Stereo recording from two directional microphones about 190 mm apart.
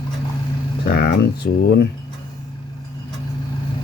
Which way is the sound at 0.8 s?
55° left (ahead or behind).